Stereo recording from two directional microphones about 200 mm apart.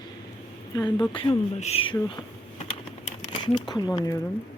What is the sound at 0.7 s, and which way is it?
Speech, 15° left (ahead or behind).